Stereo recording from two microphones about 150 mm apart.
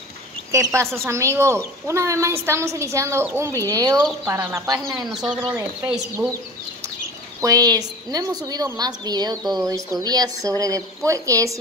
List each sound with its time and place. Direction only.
0.5 s a woman's voice: 20° right (ahead or behind)
5.1 s speech: centre (ahead or behind)
7.4 s a woman's voice: 25° right (ahead or behind)